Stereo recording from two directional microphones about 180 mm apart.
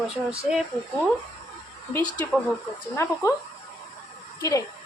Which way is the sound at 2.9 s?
15° left (ahead or behind).